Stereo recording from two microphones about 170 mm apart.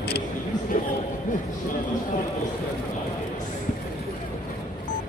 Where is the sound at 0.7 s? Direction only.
45° left (ahead or behind).